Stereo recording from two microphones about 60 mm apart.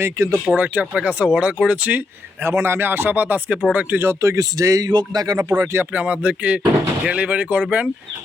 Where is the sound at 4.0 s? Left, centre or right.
Right.